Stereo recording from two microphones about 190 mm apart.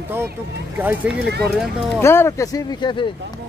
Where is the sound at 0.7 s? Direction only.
10° right (ahead or behind).